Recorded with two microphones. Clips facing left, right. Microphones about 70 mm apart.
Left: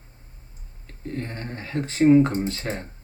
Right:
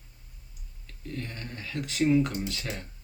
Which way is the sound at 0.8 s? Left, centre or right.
Left.